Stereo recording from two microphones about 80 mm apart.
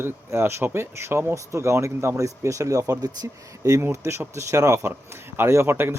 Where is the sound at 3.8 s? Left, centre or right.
Right.